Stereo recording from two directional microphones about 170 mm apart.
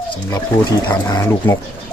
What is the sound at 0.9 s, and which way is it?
Speech, 20° left (ahead or behind).